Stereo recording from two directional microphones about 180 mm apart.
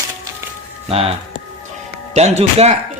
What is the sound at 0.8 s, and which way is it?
Speech, 30° right (ahead or behind).